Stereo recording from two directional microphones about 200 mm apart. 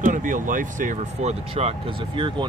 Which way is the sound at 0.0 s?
40° right (ahead or behind).